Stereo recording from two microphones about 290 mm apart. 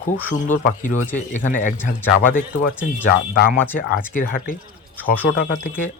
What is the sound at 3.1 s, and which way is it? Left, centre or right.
Speech, left.